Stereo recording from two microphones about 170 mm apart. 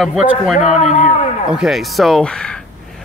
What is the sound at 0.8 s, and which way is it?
Speech, 40° left (ahead or behind).